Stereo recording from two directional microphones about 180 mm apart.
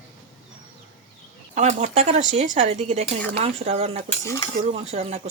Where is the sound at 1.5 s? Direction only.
40° right (ahead or behind).